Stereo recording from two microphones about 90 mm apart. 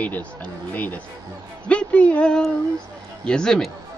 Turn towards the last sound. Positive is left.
turn(degrees=5)  # may be behind; listen again after turning